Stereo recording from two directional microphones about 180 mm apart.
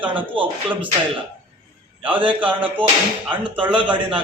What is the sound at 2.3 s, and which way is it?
Speech, 10° right (ahead or behind).